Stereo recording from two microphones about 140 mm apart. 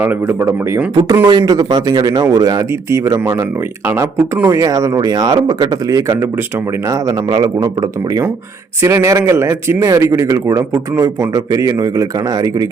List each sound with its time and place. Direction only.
0.0 s a man's voice: 15° right (ahead or behind)